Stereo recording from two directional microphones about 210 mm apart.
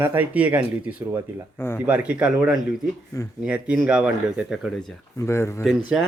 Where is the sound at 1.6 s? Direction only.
10° left (ahead or behind).